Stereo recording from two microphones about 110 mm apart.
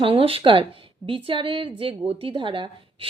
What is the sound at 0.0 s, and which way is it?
Speech, 55° right (ahead or behind).